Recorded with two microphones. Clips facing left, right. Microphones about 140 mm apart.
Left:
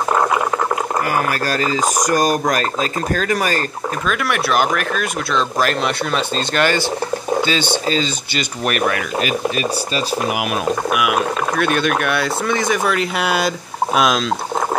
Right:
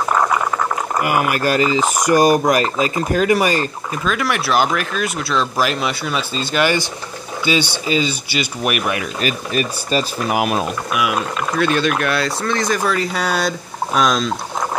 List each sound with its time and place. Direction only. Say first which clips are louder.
1.0 s speech: right 2 dB; 15° right (ahead or behind)
4.1 s speech: right 1 dB; centre (ahead or behind)
7.9 s speech: right 1 dB; 10° right (ahead or behind)
9.9 s speech: right 4 dB; 40° right (ahead or behind)
11.1 s speech: left 1 dB; 5° left (ahead or behind)